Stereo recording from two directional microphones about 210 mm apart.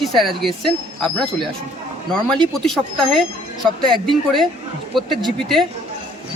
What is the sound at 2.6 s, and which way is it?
Speech, centre (ahead or behind).